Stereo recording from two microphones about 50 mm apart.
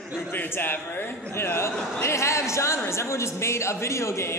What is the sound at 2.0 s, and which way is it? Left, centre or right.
A man's voice, left.